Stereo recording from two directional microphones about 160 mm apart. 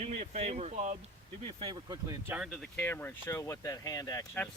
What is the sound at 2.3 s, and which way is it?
Speech, centre (ahead or behind).